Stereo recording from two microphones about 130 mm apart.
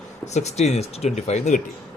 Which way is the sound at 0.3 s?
60° left (ahead or behind).